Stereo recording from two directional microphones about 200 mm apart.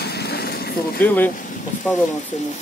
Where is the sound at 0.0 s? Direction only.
55° left (ahead or behind).